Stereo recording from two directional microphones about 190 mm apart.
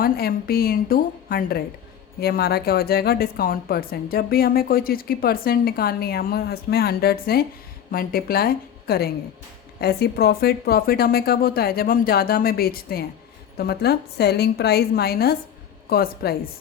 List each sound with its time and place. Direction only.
0.0 s a woman's voice: 55° left (ahead or behind)